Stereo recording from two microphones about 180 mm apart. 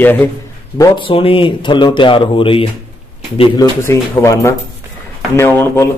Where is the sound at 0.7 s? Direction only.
30° left (ahead or behind).